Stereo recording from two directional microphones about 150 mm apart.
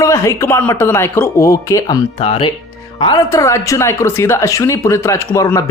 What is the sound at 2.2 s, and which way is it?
Speech, 35° left (ahead or behind).